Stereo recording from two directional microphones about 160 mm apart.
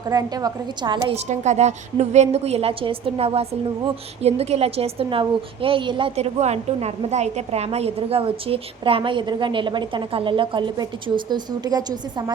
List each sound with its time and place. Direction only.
0.1 s a woman's voice: 25° right (ahead or behind)
1.1 s a woman's voice: 45° right (ahead or behind); by 11.9 s 25° right (ahead or behind)